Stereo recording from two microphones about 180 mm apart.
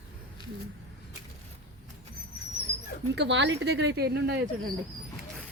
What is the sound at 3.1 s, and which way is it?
Speech, 80° right.